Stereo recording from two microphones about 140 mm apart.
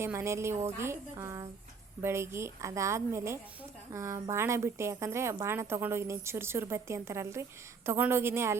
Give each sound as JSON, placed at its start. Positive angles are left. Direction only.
{"t": 0.0, "sound": "a woman's voice", "side_deg": -15}